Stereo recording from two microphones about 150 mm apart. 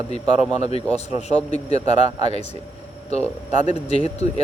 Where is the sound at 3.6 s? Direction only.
45° left (ahead or behind).